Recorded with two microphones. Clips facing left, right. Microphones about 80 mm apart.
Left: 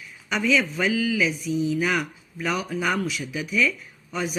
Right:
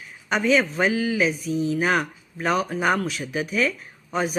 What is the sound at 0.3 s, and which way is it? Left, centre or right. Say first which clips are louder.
Speech: right 2 dB; right.